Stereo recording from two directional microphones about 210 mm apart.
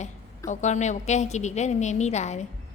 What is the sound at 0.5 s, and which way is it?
A woman's voice, 35° left (ahead or behind).